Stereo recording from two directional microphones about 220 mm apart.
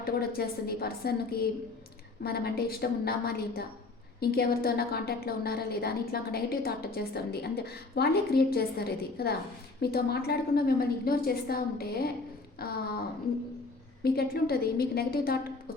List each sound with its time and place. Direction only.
0.0 s a woman's voice: 45° left (ahead or behind)